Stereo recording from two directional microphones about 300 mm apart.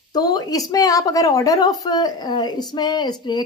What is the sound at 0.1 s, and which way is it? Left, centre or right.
Speech, centre.